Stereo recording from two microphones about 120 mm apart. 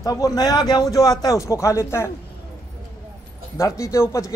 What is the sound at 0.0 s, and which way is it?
A man's voice, 30° left (ahead or behind).